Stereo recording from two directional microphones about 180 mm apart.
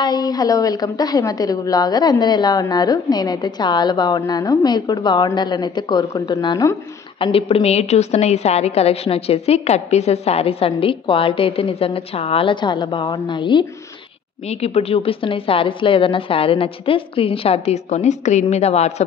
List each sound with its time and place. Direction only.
0.0 s a woman's voice: 20° left (ahead or behind)
7.2 s a woman's voice: 30° left (ahead or behind)